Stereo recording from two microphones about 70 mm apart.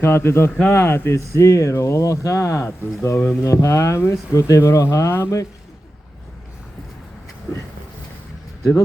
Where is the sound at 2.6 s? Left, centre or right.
Left.